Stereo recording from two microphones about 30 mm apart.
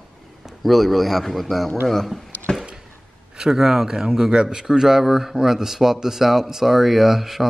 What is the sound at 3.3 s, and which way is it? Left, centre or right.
Speech, centre.